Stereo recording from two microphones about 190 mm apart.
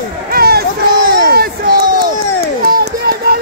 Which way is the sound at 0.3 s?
55° right (ahead or behind).